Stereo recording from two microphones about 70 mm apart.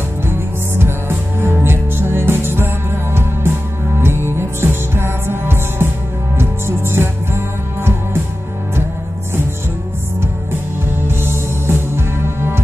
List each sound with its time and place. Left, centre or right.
0.7 s music: right
11.1 s music: right